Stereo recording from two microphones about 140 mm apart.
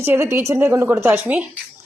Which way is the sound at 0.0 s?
15° right (ahead or behind).